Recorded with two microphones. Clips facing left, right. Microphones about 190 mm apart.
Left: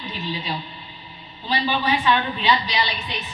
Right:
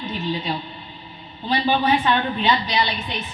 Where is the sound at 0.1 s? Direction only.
50° right (ahead or behind).